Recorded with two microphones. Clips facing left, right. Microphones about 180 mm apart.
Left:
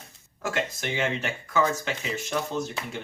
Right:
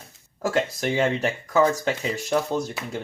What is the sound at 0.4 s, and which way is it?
Speech, 35° right (ahead or behind).